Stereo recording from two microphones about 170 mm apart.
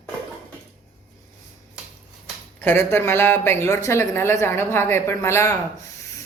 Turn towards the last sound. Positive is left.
turn(degrees=15)  # may be behind; listen again after turning